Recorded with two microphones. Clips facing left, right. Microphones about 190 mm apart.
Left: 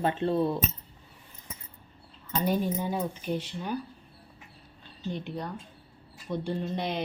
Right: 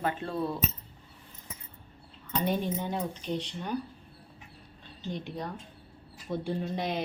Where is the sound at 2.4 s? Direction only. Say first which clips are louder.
Left 2 dB; 5° left (ahead or behind).